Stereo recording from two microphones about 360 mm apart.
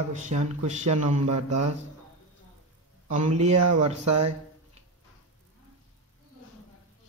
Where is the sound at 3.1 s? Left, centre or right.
Centre.